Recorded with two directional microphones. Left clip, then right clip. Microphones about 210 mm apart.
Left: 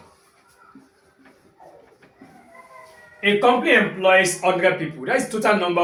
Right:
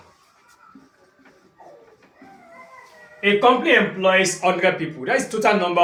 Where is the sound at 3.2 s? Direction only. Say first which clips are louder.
Right 1 dB; 20° right (ahead or behind).